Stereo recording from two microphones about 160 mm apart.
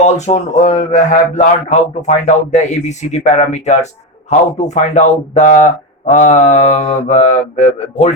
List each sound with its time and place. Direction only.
0.0 s speech: 45° left (ahead or behind)